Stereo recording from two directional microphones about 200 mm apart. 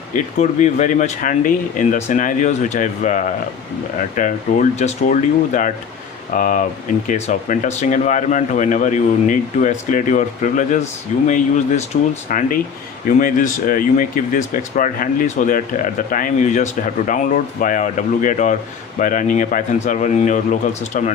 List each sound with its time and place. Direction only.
0.1 s speech: 35° left (ahead or behind)